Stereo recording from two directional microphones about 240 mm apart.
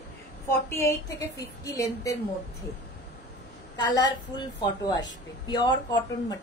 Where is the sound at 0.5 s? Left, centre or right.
Centre.